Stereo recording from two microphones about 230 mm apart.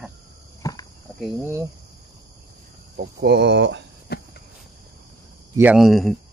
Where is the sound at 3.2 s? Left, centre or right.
Right.